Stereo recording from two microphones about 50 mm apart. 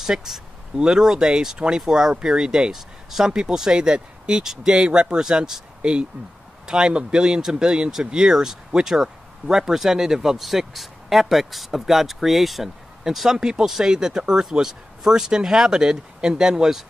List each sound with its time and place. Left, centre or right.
0.0 s speech: centre